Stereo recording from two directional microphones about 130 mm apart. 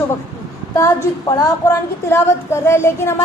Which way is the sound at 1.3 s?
25° left (ahead or behind).